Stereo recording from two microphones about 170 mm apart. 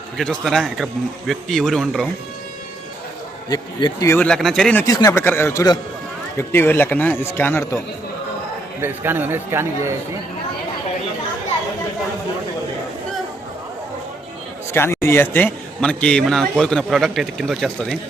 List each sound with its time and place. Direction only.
0.2 s a man's voice: centre (ahead or behind)
3.5 s speech: 25° left (ahead or behind)
4.1 s a man's voice: 5° left (ahead or behind)
4.9 s a man's voice: 20° left (ahead or behind)
8.8 s a man's voice: 10° right (ahead or behind)
14.7 s a man's voice: 15° left (ahead or behind)